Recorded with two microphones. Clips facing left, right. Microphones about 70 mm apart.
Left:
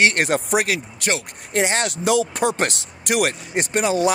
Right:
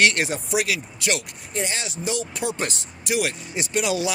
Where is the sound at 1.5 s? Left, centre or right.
Left.